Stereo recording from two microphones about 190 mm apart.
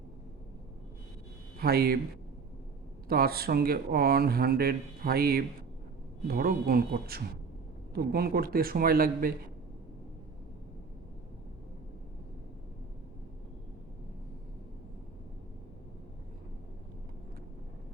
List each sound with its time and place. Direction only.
1.5 s speech: 55° right (ahead or behind)
3.1 s speech: 55° right (ahead or behind)